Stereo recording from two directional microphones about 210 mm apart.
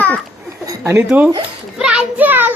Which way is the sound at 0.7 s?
10° right (ahead or behind).